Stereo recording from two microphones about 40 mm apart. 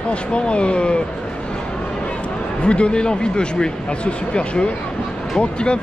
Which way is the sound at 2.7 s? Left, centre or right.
Left.